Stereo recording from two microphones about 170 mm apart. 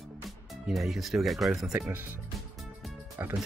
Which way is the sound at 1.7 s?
15° right (ahead or behind).